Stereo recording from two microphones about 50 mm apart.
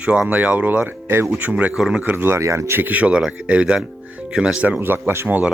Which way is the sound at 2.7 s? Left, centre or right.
Right.